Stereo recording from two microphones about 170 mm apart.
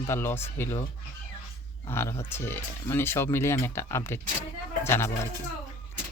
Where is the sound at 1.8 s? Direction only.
15° left (ahead or behind).